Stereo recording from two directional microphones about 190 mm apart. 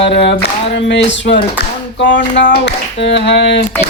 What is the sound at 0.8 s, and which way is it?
Speech, 65° left (ahead or behind).